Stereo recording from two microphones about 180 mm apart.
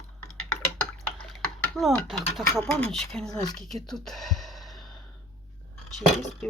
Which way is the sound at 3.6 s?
Centre (ahead or behind).